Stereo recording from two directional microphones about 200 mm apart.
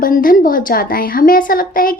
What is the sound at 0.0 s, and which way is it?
A woman's voice, 45° left (ahead or behind).